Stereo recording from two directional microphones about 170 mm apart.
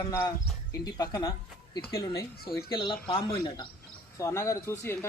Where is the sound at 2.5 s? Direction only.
25° left (ahead or behind).